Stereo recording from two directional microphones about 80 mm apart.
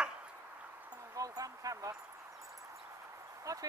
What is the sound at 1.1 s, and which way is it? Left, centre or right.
Speech, right.